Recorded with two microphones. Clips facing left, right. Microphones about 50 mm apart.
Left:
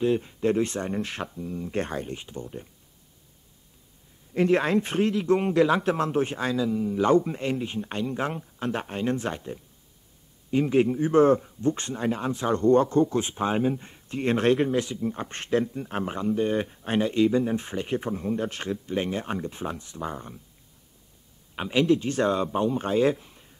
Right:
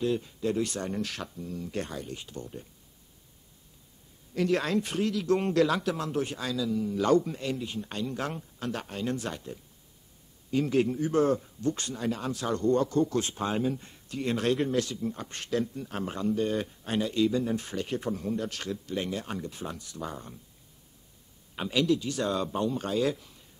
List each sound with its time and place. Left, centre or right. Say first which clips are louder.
0.0 s speech: left 5 dB; left
2.1 s speech: left 3 dB; left
4.3 s speech: left 5 dB; left
14.7 s speech: left 3 dB; left
21.5 s speech: left 4 dB; left